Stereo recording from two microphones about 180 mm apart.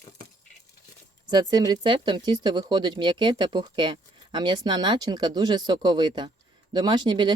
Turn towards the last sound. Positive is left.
turn(degrees=-25)  # may be behind; listen again after turning